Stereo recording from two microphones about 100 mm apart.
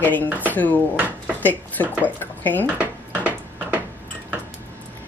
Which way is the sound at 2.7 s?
15° right (ahead or behind).